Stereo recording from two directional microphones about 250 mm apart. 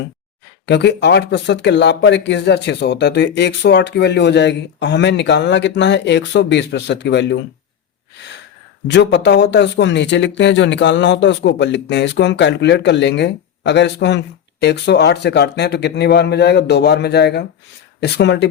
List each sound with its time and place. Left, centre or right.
0.6 s speech: left
8.9 s speech: left